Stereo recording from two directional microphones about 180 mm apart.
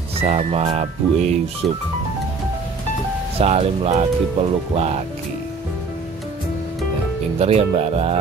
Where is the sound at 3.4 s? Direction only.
35° right (ahead or behind).